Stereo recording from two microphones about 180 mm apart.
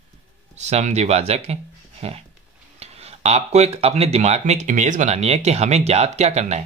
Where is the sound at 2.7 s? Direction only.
35° right (ahead or behind).